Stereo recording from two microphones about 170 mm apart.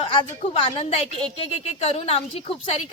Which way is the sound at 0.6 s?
35° left (ahead or behind).